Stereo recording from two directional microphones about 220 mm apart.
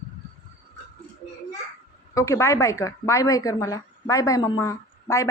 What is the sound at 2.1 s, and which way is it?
A woman's voice, 15° left (ahead or behind).